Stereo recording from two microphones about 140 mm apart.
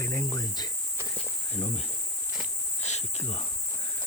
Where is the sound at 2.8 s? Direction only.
55° left (ahead or behind).